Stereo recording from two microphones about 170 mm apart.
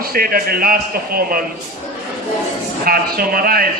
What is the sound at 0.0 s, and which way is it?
A man's voice, 60° right (ahead or behind).